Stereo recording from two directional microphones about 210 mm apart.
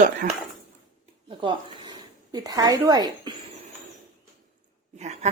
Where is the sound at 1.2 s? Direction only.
25° right (ahead or behind).